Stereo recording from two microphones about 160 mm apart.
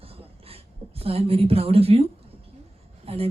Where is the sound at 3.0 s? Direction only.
40° right (ahead or behind).